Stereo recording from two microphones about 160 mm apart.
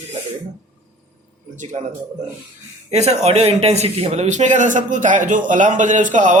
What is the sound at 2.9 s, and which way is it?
Speech, 40° right (ahead or behind).